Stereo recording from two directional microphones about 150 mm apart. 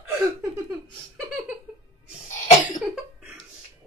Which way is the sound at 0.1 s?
20° right (ahead or behind).